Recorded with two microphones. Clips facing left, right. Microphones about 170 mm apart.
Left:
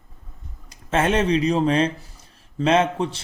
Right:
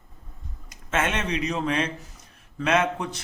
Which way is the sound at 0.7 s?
35° left (ahead or behind).